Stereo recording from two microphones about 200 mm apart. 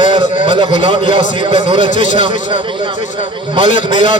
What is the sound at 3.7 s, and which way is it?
Speech, 40° left (ahead or behind).